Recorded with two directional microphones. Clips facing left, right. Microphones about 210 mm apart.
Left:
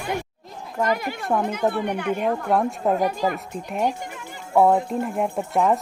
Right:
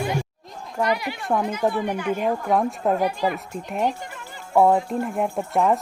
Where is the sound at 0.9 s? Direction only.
45° left (ahead or behind).